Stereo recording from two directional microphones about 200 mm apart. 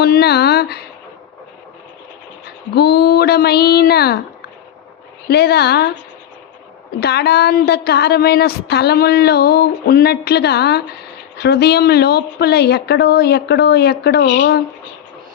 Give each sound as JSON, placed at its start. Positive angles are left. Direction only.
{"t": 0.0, "sound": "speech", "side_deg": 50}
{"t": 2.7, "sound": "a woman's voice", "side_deg": 55}
{"t": 5.3, "sound": "speech", "side_deg": 55}
{"t": 7.0, "sound": "a woman's voice", "side_deg": 55}